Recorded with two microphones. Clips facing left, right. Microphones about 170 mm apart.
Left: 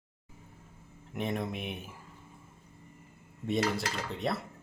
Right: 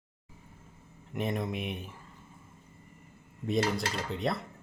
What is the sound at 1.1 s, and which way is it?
Speech, centre (ahead or behind).